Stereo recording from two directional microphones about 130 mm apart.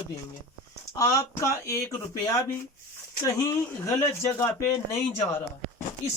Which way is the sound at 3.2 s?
25° left (ahead or behind).